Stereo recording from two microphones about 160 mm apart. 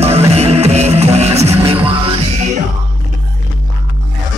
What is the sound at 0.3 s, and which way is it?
Music, 40° right (ahead or behind).